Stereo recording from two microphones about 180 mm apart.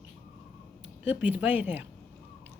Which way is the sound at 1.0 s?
10° right (ahead or behind).